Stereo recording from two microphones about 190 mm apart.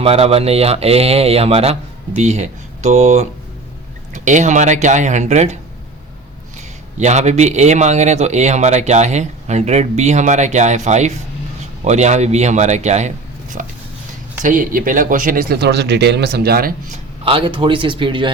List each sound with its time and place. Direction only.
0.0 s a man's voice: 30° right (ahead or behind)
7.0 s a man's voice: 35° right (ahead or behind)
17.2 s speech: 30° right (ahead or behind)